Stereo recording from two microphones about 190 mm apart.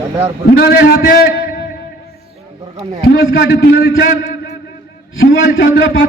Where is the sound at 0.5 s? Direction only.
55° left (ahead or behind).